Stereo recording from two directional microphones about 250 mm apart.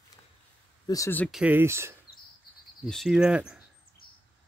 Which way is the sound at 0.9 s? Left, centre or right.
Centre.